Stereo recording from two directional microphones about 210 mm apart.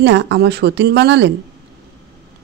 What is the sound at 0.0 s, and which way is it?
A man's voice, 60° right (ahead or behind).